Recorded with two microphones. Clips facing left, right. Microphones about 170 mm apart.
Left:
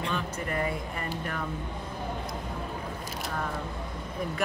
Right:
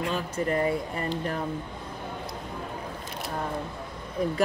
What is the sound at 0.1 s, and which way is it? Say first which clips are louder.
Speech: right 4 dB; 35° right (ahead or behind).